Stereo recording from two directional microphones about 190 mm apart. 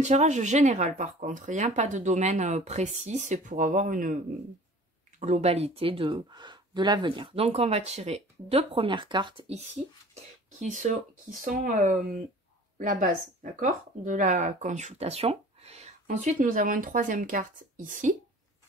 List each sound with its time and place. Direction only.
0.0 s speech: 40° right (ahead or behind)
5.2 s speech: 35° right (ahead or behind)